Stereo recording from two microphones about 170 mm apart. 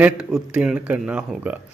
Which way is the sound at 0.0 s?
5° right (ahead or behind).